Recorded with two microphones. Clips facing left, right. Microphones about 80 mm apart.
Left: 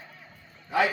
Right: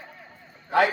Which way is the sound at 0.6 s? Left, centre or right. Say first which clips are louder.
Right 4 dB; right.